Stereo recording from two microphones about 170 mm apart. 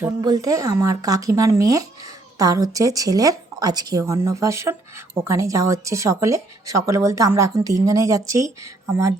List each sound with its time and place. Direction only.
0.2 s speech: 20° right (ahead or behind)